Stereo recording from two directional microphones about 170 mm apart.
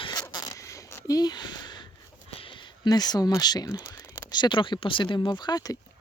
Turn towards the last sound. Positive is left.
turn(degrees=25)  # may be behind; listen again after turning